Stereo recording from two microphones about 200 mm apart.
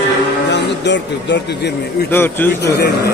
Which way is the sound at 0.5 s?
60° left (ahead or behind).